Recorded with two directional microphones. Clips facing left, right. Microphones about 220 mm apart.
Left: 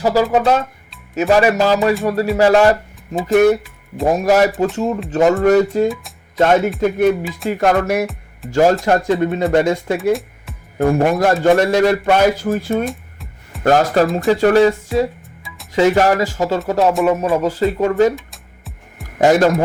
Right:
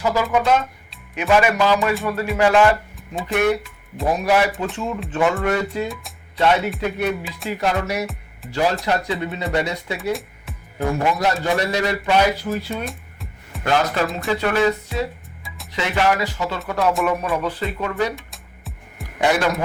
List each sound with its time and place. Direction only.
0.0 s a man's voice: 35° left (ahead or behind)
10.0 s music: centre (ahead or behind)
10.8 s a man's voice: 55° left (ahead or behind)
12.8 s music: centre (ahead or behind)
13.7 s a man's voice: 40° left (ahead or behind)
18.3 s music: centre (ahead or behind)
19.2 s a man's voice: 45° left (ahead or behind)